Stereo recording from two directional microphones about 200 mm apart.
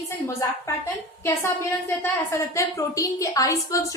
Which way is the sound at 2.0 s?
15° left (ahead or behind).